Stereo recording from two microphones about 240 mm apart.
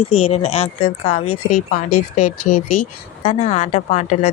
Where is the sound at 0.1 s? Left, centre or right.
Left.